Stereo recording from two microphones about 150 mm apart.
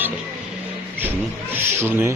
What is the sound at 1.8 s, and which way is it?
Speech, 15° right (ahead or behind).